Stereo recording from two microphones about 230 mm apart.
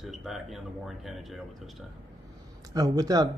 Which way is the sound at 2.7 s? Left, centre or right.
Centre.